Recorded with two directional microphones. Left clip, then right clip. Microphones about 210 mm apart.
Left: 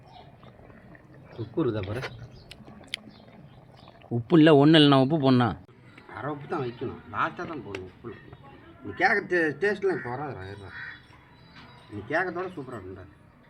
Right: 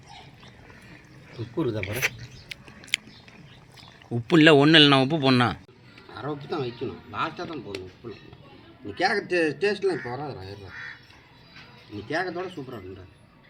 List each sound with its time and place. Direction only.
1.5 s speech: 5° left (ahead or behind)
1.8 s chewing: 20° left (ahead or behind)
4.1 s a man's voice: 15° left (ahead or behind)
9.0 s speech: centre (ahead or behind)
12.0 s speech: centre (ahead or behind)